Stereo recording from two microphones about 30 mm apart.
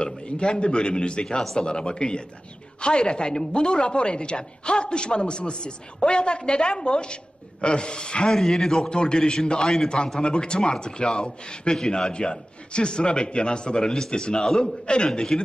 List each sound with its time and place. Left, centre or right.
0.0 s a woman's voice: left
8.3 s a man's voice: centre
8.9 s a man's voice: left
10.2 s a man's voice: left
11.8 s a man's voice: centre
12.1 s a woman's voice: left